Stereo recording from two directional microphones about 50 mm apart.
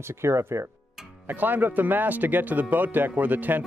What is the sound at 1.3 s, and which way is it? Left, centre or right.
Speech, right.